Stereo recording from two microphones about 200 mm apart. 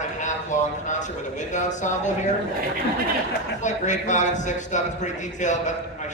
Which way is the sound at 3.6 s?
35° left (ahead or behind).